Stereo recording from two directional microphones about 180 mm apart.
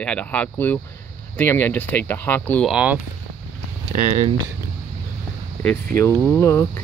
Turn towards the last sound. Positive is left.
turn(degrees=15)  # may be behind; listen again after turning